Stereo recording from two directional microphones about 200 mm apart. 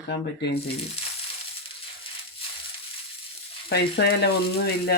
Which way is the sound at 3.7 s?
55° left (ahead or behind).